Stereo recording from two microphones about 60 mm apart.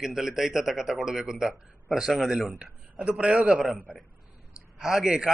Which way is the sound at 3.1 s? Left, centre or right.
Centre.